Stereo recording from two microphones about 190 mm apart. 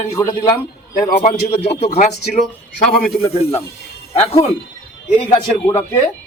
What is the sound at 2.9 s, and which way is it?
Speech, 50° left (ahead or behind).